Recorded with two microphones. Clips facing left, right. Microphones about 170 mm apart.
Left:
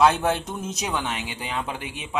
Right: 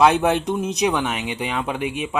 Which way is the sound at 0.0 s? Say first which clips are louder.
Right 4 dB; 15° right (ahead or behind).